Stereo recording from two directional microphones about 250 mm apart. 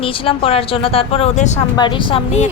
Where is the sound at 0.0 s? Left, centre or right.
Left.